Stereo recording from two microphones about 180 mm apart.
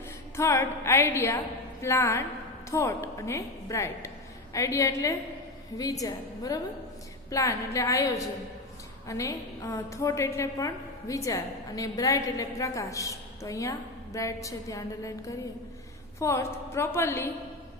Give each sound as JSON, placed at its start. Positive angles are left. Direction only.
{"t": 0.3, "sound": "a woman's voice", "side_deg": 15}